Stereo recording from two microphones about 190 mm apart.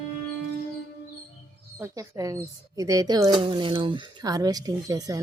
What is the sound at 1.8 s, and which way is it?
Speech, 15° right (ahead or behind).